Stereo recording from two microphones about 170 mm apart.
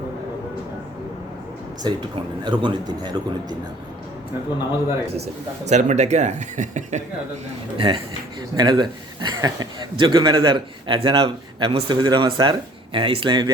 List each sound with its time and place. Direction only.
1.8 s a man's voice: 25° right (ahead or behind)
5.1 s speech: 40° right (ahead or behind)
7.8 s a man's voice: 30° right (ahead or behind)